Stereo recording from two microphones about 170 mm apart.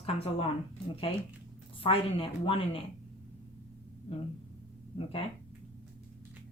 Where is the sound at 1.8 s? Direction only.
35° left (ahead or behind).